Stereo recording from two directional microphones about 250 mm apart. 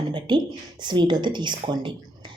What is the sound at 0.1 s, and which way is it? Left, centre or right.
Speech, centre.